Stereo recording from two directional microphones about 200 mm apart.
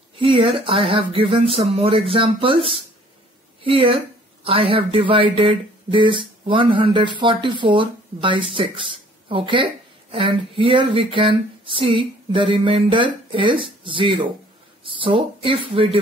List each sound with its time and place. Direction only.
0.1 s speech: 25° right (ahead or behind)